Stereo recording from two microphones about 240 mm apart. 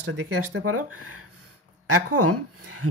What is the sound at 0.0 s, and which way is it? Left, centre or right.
Speech, right.